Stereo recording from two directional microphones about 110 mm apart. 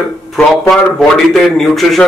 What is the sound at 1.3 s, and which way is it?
Speech, centre (ahead or behind).